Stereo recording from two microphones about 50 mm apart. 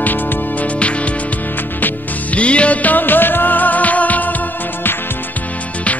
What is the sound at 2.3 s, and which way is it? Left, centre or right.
Music, left.